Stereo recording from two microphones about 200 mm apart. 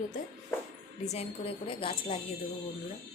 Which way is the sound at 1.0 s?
30° left (ahead or behind).